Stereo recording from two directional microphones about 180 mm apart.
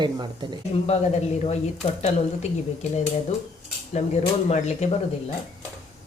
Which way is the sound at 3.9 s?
40° left (ahead or behind).